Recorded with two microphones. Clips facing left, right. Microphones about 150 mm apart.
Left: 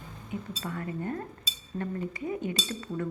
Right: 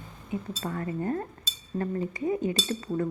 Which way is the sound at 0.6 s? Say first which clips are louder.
Right 4 dB; 35° right (ahead or behind).